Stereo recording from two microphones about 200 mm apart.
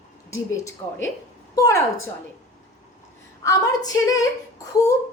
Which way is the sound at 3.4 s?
20° left (ahead or behind).